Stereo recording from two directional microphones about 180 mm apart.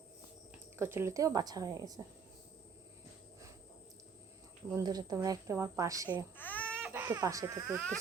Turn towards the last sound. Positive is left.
turn(degrees=5)  # may be behind; listen again after turning